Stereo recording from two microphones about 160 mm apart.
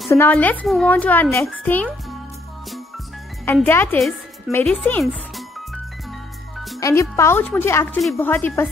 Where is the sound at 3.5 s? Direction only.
15° left (ahead or behind).